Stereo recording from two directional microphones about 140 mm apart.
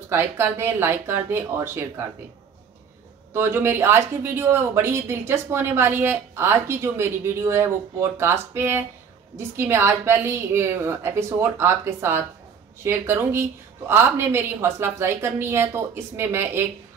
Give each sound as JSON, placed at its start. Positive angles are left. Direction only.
{"t": 0.1, "sound": "speech", "side_deg": -15}
{"t": 3.3, "sound": "speech", "side_deg": -15}